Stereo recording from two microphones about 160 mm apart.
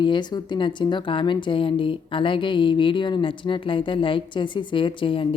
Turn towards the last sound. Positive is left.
turn(degrees=35)  # may be behind; listen again after turning